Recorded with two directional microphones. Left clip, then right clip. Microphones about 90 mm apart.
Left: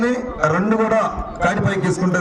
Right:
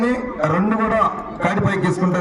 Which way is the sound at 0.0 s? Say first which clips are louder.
Left 1 dB; 55° left (ahead or behind).